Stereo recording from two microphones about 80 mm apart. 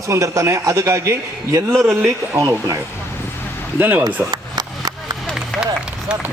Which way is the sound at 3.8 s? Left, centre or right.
Right.